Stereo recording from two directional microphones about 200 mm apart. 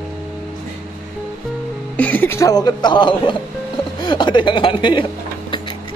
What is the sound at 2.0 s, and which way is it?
Speech, 10° left (ahead or behind).